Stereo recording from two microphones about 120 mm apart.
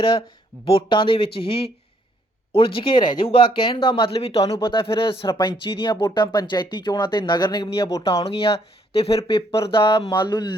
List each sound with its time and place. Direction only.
0.0 s speech: 45° left (ahead or behind)
8.0 s speech: 50° left (ahead or behind)